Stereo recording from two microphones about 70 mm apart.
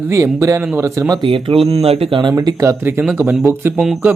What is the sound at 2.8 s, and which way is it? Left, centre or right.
Speech, right.